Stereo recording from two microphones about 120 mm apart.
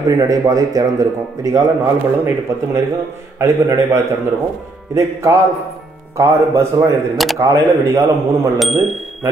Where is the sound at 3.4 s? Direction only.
20° right (ahead or behind).